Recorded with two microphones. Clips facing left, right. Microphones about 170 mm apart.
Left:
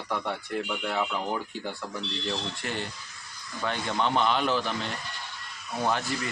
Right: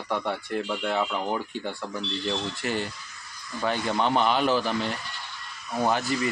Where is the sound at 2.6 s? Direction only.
5° right (ahead or behind).